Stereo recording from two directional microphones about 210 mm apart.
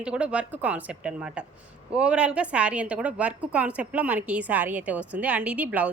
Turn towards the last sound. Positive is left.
turn(degrees=-5)  # may be behind; listen again after turning